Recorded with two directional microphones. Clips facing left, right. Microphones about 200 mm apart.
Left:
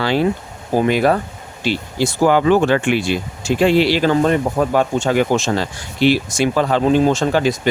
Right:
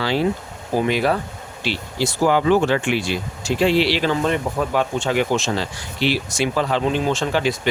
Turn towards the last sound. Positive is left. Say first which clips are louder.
# left 4 dB
turn(degrees=45)  # may be behind; listen again after turning